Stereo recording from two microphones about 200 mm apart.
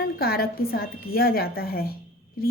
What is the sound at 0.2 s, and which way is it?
A woman's voice, 50° left (ahead or behind).